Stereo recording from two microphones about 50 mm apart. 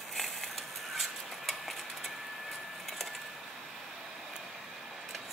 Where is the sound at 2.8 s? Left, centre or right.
Centre.